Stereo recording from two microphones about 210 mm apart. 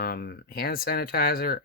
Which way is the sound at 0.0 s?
45° left (ahead or behind).